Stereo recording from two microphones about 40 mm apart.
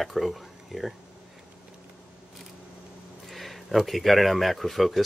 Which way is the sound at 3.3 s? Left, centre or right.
Centre.